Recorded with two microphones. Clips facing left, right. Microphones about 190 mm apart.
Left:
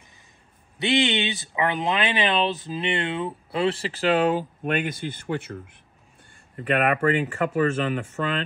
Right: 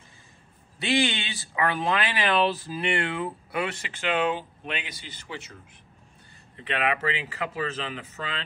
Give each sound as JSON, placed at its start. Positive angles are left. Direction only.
{"t": 0.7, "sound": "speech", "side_deg": 20}